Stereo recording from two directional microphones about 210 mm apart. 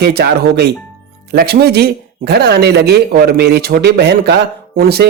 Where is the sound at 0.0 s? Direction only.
50° right (ahead or behind).